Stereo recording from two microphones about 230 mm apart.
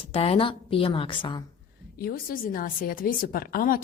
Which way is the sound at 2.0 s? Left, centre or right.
Left.